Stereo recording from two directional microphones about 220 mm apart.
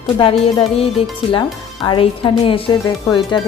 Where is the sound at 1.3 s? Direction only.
20° left (ahead or behind).